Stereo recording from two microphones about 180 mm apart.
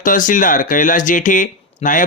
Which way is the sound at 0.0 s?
45° left (ahead or behind).